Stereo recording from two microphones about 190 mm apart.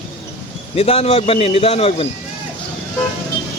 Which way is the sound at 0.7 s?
30° left (ahead or behind).